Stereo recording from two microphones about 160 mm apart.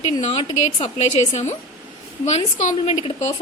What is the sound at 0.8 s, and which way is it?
A woman's voice, 45° left (ahead or behind).